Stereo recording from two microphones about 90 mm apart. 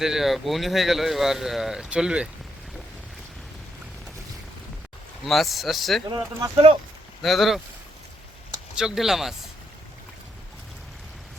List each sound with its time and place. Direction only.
0.0 s speech: 5° right (ahead or behind)
5.2 s speech: centre (ahead or behind)
6.1 s speech: 45° right (ahead or behind)
7.2 s speech: centre (ahead or behind)
8.7 s speech: 5° right (ahead or behind)